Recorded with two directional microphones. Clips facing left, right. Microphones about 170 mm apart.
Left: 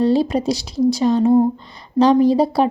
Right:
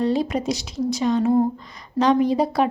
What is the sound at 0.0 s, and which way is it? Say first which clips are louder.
A woman's voice: left 5 dB; 30° left (ahead or behind).